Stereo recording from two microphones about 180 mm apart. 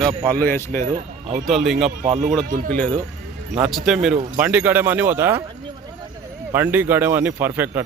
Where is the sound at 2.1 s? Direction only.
40° right (ahead or behind).